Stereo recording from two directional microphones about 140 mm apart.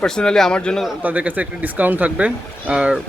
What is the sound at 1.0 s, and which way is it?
Speech, 10° right (ahead or behind).